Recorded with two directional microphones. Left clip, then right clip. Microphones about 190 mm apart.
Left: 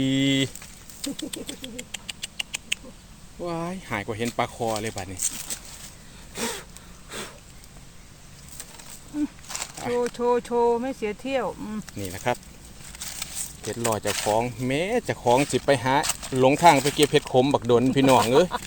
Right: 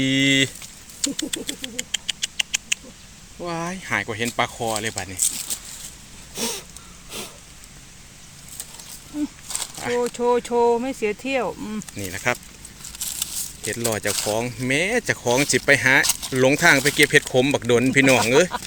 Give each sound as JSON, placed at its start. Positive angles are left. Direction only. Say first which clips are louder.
{"t": 0.0, "sound": "speech", "louder": "right 5 dB", "side_deg": 0}
{"t": 1.0, "sound": "rodents", "louder": "right 6 dB", "side_deg": -5}
{"t": 3.4, "sound": "speech", "louder": "right 3 dB", "side_deg": 0}
{"t": 6.3, "sound": "a sound", "louder": "right 3 dB", "side_deg": -15}
{"t": 9.6, "sound": "a sound", "louder": "right 3 dB", "side_deg": 5}
{"t": 10.0, "sound": "speech", "louder": "right 3 dB", "side_deg": -35}
{"t": 11.9, "sound": "speech", "louder": "right 3 dB", "side_deg": 0}
{"t": 13.6, "sound": "speech", "louder": "right 1 dB", "side_deg": 0}